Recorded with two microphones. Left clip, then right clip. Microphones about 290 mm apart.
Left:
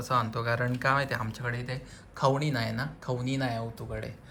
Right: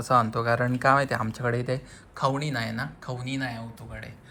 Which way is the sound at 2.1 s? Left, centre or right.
Centre.